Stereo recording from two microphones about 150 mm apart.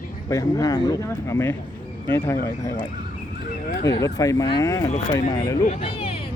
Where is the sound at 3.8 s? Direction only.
25° left (ahead or behind).